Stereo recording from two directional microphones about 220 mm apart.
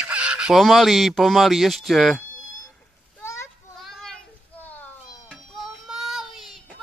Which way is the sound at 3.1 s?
10° left (ahead or behind).